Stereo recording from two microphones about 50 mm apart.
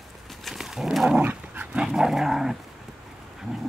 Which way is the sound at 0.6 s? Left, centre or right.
Centre.